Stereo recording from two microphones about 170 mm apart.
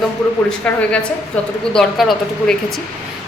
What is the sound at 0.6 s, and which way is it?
A woman's voice, 5° left (ahead or behind).